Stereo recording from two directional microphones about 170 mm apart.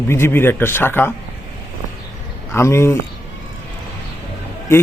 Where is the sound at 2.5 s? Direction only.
15° left (ahead or behind).